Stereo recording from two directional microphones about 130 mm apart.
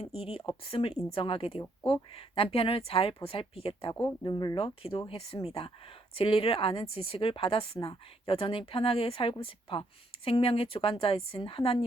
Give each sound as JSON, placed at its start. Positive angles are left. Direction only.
{"t": 0.0, "sound": "speech", "side_deg": 50}
{"t": 4.0, "sound": "speech", "side_deg": 35}